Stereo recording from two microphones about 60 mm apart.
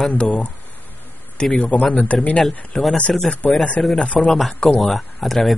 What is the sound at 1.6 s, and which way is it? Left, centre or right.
A man's voice, centre.